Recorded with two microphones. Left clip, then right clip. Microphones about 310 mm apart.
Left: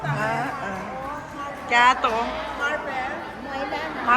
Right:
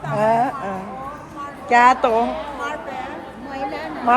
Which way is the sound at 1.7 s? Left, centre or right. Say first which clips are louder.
Right 4 dB; centre.